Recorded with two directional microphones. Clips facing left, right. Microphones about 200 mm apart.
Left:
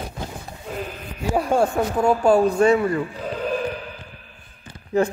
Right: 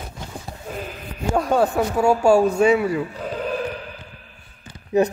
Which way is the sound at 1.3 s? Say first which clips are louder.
Right 1 dB; centre (ahead or behind).